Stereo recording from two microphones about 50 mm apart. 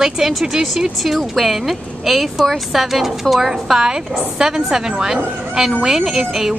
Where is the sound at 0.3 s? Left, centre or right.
Centre.